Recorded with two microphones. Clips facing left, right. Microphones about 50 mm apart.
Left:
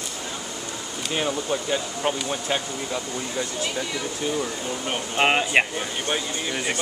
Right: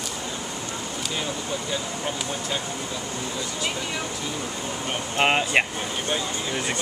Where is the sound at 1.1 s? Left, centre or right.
Left.